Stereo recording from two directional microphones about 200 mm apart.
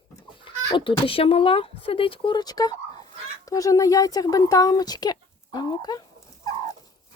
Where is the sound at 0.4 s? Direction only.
25° left (ahead or behind).